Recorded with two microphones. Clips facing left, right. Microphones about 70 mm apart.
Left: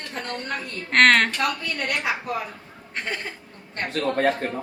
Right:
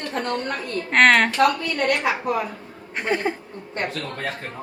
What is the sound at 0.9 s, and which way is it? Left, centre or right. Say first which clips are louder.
Speech: right 1 dB; centre.